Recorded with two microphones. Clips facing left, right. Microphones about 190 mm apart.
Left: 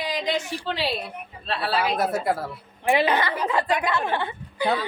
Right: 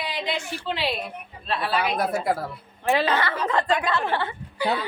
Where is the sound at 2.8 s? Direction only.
15° left (ahead or behind).